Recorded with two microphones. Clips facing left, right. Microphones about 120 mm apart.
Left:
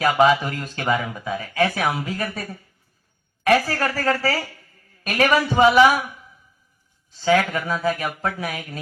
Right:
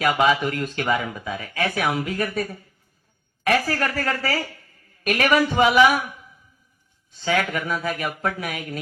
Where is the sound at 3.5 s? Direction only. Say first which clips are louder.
Left 1 dB; 35° left (ahead or behind).